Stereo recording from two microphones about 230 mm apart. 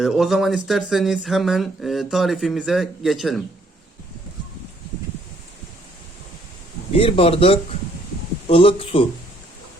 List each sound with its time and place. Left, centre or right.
0.0 s speech: centre
6.9 s a man's voice: left